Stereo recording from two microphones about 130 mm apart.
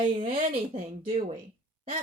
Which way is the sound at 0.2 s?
75° right (ahead or behind).